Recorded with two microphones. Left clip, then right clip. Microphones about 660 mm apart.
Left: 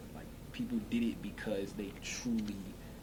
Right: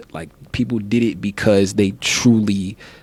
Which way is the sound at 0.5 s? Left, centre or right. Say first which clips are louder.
Right 18 dB; right.